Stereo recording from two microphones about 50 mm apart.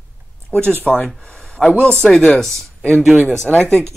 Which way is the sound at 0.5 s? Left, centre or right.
Centre.